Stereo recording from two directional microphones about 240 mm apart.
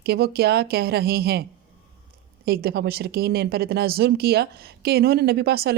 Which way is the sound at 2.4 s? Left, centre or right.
Right.